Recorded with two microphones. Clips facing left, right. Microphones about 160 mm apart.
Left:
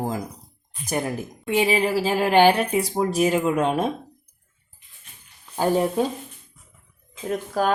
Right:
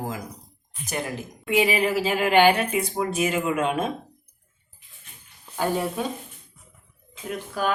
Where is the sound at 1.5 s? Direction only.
30° left (ahead or behind).